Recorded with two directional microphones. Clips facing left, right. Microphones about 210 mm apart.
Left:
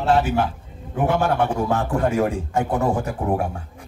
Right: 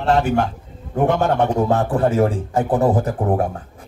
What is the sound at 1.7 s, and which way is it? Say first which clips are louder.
A man's voice: right 3 dB; 35° right (ahead or behind).